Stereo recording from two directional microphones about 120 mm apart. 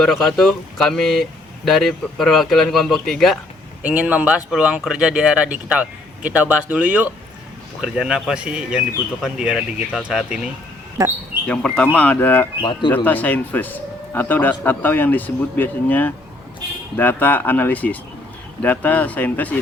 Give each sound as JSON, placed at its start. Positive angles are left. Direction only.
{"t": 0.0, "sound": "speech", "side_deg": 0}
{"t": 3.8, "sound": "speech", "side_deg": -10}
{"t": 11.4, "sound": "a man's voice", "side_deg": 10}